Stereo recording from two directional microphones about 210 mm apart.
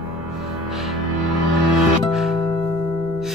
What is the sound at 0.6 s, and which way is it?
Music, centre (ahead or behind).